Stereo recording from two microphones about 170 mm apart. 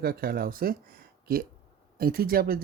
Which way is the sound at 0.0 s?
65° right (ahead or behind).